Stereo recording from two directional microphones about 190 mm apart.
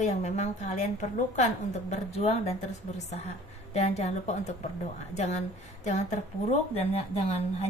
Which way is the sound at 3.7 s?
35° left (ahead or behind).